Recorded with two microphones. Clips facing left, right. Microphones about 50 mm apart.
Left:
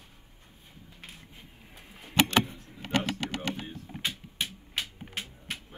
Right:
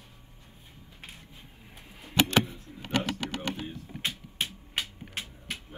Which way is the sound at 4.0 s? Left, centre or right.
Right.